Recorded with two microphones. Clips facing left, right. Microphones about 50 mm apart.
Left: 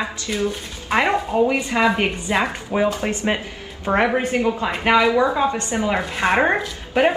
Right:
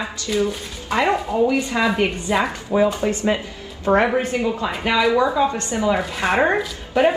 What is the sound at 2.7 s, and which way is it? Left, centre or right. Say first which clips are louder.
A woman's voice: right 2 dB; left.